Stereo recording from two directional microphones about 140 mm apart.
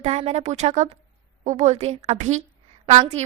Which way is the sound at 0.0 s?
50° right (ahead or behind).